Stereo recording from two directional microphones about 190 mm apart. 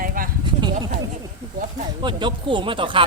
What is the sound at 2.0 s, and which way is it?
Speech, 25° right (ahead or behind).